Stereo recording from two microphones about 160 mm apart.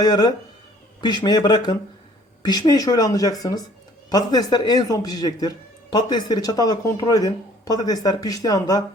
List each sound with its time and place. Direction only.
0.0 s speech: 25° left (ahead or behind)